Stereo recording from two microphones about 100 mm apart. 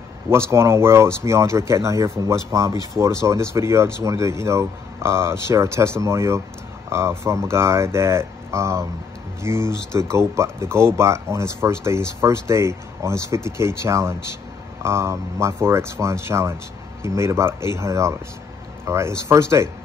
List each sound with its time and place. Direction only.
0.3 s speech: 25° right (ahead or behind)